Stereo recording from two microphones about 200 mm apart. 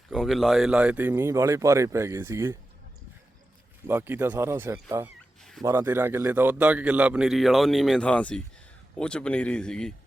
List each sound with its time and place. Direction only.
0.1 s a man's voice: centre (ahead or behind)
3.8 s a man's voice: 10° right (ahead or behind)